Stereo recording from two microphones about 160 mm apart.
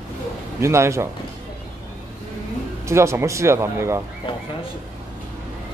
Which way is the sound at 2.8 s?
15° right (ahead or behind).